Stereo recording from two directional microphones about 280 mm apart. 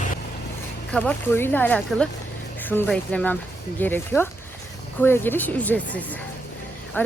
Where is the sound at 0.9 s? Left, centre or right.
Centre.